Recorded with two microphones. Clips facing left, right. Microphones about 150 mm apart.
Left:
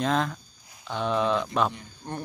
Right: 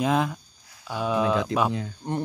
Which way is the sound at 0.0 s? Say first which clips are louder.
Right 2 dB; 10° right (ahead or behind).